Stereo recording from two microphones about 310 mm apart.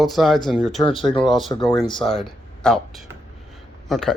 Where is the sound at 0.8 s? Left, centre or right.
Centre.